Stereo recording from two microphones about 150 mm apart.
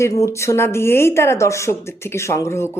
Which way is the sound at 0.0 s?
20° left (ahead or behind).